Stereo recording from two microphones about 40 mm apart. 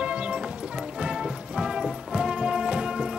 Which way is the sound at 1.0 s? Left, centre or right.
Centre.